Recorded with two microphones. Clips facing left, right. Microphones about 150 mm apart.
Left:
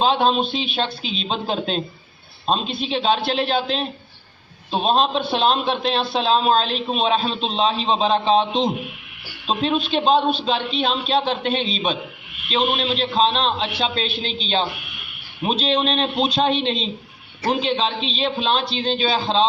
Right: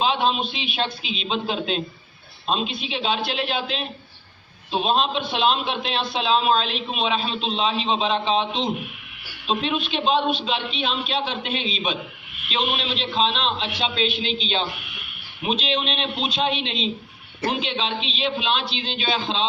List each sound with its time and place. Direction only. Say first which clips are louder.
0.0 s a man's voice: left 4 dB; 35° left (ahead or behind)